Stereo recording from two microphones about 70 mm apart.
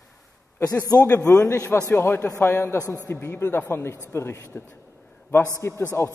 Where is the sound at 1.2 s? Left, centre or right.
Left.